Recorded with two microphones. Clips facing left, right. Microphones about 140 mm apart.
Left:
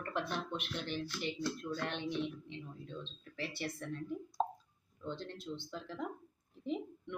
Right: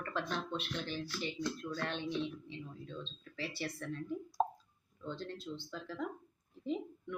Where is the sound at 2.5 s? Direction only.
20° left (ahead or behind).